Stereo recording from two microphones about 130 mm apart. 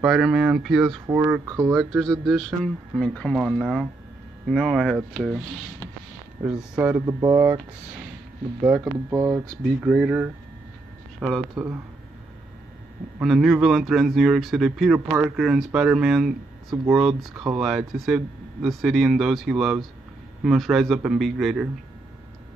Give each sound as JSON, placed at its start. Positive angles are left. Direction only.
{"t": 0.0, "sound": "speech", "side_deg": 0}
{"t": 1.0, "sound": "speech", "side_deg": -20}
{"t": 1.8, "sound": "speech", "side_deg": 5}
{"t": 6.4, "sound": "speech", "side_deg": -10}
{"t": 7.1, "sound": "speech", "side_deg": -35}
{"t": 8.7, "sound": "speech", "side_deg": -15}
{"t": 13.2, "sound": "speech", "side_deg": 0}